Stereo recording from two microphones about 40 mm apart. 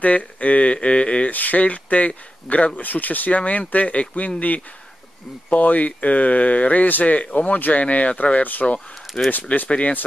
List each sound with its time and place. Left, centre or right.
0.0 s speech: left
1.3 s speech: left
5.5 s speech: left
9.1 s speech: left